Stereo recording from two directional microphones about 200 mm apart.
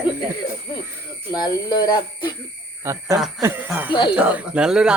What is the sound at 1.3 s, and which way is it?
Speech, 20° left (ahead or behind).